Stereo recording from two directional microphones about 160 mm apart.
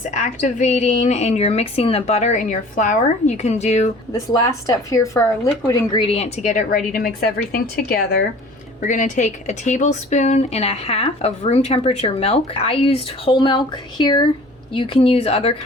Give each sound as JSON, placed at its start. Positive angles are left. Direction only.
{"t": 0.2, "sound": "a woman's voice", "side_deg": 50}
{"t": 4.3, "sound": "speech", "side_deg": 20}
{"t": 5.9, "sound": "a woman's voice", "side_deg": 35}
{"t": 7.5, "sound": "speech", "side_deg": 70}
{"t": 8.8, "sound": "speech", "side_deg": 55}